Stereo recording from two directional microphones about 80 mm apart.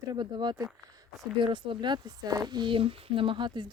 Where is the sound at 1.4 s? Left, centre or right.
Right.